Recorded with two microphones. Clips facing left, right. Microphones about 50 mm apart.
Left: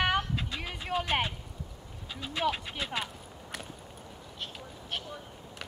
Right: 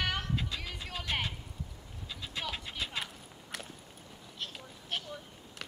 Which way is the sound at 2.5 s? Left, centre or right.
Left.